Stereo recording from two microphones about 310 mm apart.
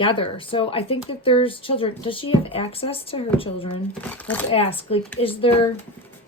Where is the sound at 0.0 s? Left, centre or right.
Centre.